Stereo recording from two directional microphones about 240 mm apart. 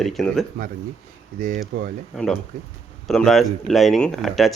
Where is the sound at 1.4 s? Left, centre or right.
Right.